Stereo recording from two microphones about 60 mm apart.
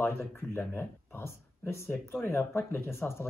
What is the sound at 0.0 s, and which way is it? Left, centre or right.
Speech, left.